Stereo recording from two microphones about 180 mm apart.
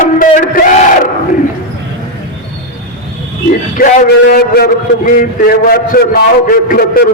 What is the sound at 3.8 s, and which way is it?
A man's voice, 50° left (ahead or behind).